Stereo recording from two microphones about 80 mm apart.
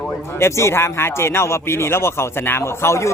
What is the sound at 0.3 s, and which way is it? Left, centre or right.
Speech, left.